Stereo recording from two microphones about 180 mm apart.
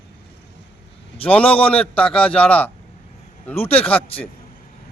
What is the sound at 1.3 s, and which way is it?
A man's voice, 10° left (ahead or behind).